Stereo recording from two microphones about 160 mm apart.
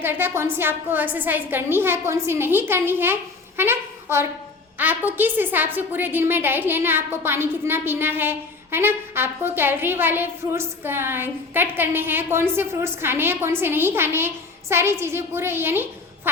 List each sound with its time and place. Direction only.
0.0 s a woman's voice: 15° right (ahead or behind)